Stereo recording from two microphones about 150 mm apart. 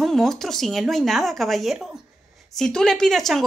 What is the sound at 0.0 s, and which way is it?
A woman's voice, centre (ahead or behind).